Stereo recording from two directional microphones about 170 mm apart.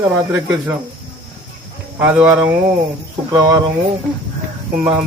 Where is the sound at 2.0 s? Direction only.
10° right (ahead or behind).